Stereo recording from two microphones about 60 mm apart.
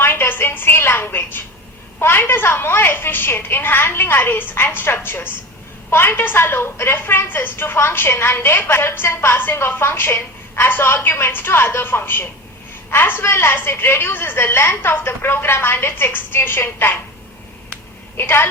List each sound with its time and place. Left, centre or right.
0.0 s a sound: left
2.0 s a woman's voice: left
18.2 s a woman's voice: left